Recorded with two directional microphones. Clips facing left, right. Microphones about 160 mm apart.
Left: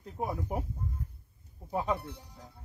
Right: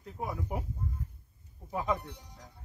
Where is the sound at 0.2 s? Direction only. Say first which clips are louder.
Left 2 dB; 25° left (ahead or behind).